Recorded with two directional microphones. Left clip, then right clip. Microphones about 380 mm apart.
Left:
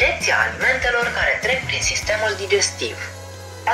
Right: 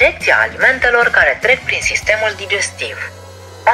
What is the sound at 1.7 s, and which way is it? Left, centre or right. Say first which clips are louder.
Speech: right 6 dB; right.